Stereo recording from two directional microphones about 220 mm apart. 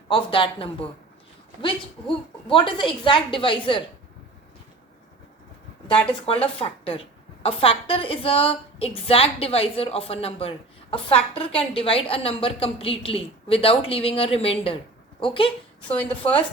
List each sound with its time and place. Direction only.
0.1 s a woman's voice: 25° left (ahead or behind)
2.5 s a woman's voice: 20° left (ahead or behind)
6.2 s a woman's voice: 25° left (ahead or behind)
15.8 s a woman's voice: 5° left (ahead or behind)